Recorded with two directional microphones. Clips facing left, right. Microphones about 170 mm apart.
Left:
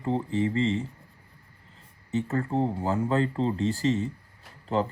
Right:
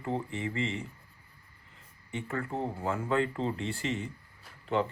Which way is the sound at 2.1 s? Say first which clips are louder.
Left 8 dB; 40° left (ahead or behind).